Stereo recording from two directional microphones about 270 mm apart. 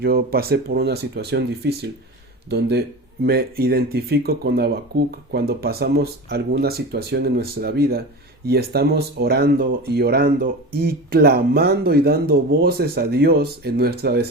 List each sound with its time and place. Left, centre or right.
0.0 s speech: right